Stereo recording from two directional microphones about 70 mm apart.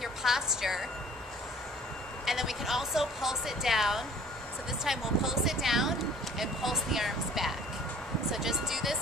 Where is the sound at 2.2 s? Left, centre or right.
Centre.